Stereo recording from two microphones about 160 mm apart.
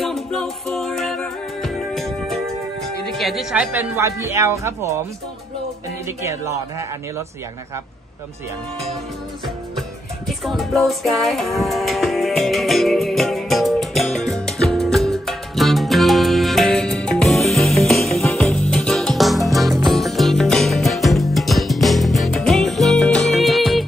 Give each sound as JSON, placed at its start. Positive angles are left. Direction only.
{"t": 0.0, "sound": "music", "side_deg": 5}
{"t": 3.1, "sound": "speech", "side_deg": 0}
{"t": 6.0, "sound": "speech", "side_deg": -15}
{"t": 9.8, "sound": "music", "side_deg": 0}